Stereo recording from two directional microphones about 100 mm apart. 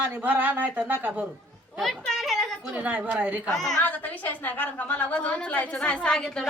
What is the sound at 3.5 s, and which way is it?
Speech, 5° left (ahead or behind).